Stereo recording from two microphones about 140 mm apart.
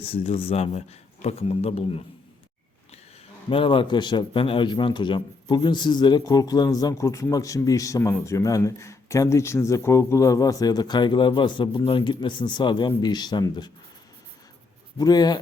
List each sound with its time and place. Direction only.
0.0 s speech: 45° left (ahead or behind)
3.5 s a man's voice: 40° left (ahead or behind)
14.9 s a man's voice: 30° left (ahead or behind)